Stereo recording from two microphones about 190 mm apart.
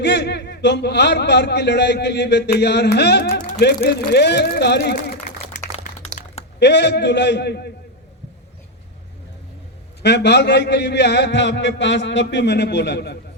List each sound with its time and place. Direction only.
0.0 s a man's voice: 65° left (ahead or behind)
6.2 s a sound: 45° left (ahead or behind)
6.6 s a man's voice: 65° left (ahead or behind)
10.0 s a man's voice: 65° left (ahead or behind)